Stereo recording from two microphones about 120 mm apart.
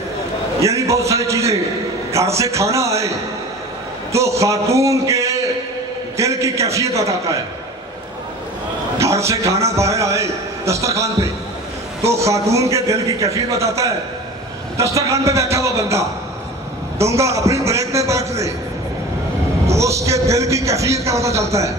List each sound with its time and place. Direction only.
0.6 s a man's voice: 25° right (ahead or behind)
4.1 s a man's voice: 25° right (ahead or behind)
9.0 s a man's voice: 25° right (ahead or behind)
17.0 s a sound: 25° right (ahead or behind)
19.6 s a man's voice: 25° right (ahead or behind)